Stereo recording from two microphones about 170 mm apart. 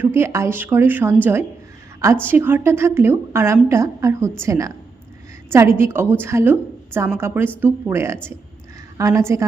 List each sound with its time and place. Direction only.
0.0 s a woman's voice: 15° right (ahead or behind)